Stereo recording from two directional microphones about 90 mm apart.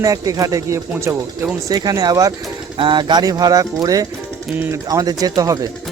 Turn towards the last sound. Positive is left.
turn(degrees=-40)  # may be behind; listen again after turning